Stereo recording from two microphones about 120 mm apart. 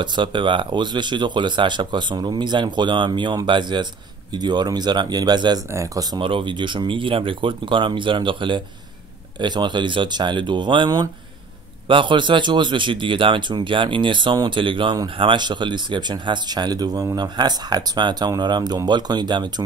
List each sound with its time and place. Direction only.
0.0 s speech: 40° right (ahead or behind)
5.7 s speech: 25° right (ahead or behind)
6.1 s speech: 45° right (ahead or behind)